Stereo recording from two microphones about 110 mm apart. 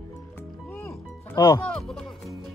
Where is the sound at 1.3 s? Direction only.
35° left (ahead or behind).